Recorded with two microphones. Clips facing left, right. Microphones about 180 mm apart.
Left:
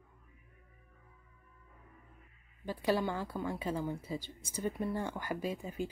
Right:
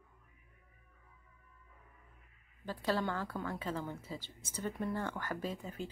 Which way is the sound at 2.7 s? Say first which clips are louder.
Left 3 dB; 15° left (ahead or behind).